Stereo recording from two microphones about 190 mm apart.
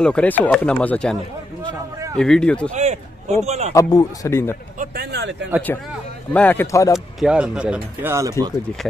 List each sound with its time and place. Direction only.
0.0 s speech: 5° left (ahead or behind)
2.1 s speech: 5° left (ahead or behind)
2.7 s a sound: 35° right (ahead or behind)
3.4 s a man's voice: 35° right (ahead or behind)
3.7 s speech: 15° left (ahead or behind)
4.7 s a sound: 60° right (ahead or behind)
6.3 s speech: 10° left (ahead or behind)
7.2 s speech: 5° right (ahead or behind)